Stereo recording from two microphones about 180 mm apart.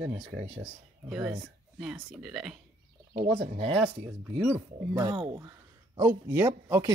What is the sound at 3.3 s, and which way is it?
Speech, 35° right (ahead or behind).